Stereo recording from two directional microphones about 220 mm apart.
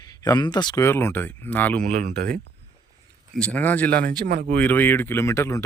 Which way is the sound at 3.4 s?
5° left (ahead or behind).